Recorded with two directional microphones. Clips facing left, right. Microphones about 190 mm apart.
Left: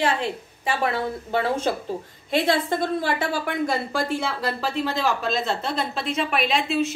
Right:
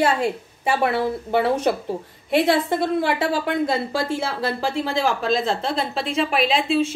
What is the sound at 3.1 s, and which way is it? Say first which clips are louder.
A woman's voice: right 4 dB; 20° right (ahead or behind).